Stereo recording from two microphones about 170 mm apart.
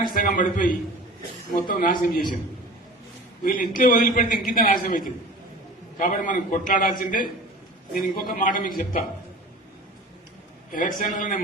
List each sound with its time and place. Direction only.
0.1 s a man's voice: 55° left (ahead or behind)
3.4 s a man's voice: 55° left (ahead or behind)
10.7 s a man's voice: 50° left (ahead or behind)